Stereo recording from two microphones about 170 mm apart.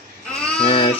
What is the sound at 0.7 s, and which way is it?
Speech, 35° left (ahead or behind).